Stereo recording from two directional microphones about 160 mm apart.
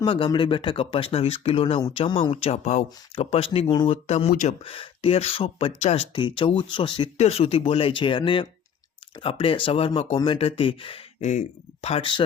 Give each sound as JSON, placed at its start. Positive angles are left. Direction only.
{"t": 0.0, "sound": "speech", "side_deg": 35}
{"t": 4.6, "sound": "speech", "side_deg": 35}
{"t": 11.2, "sound": "speech", "side_deg": 50}